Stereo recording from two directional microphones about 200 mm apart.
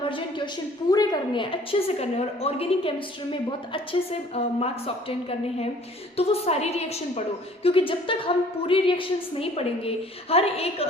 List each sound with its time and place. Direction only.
0.0 s a woman's voice: 25° left (ahead or behind)
4.4 s a woman's voice: 30° left (ahead or behind)
6.1 s a woman's voice: 30° left (ahead or behind)